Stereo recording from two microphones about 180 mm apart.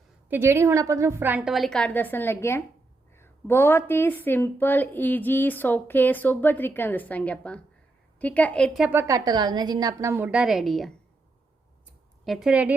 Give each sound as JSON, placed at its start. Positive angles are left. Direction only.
{"t": 0.3, "sound": "a woman's voice", "side_deg": -15}
{"t": 8.9, "sound": "a woman's voice", "side_deg": -15}
{"t": 12.2, "sound": "a woman's voice", "side_deg": 0}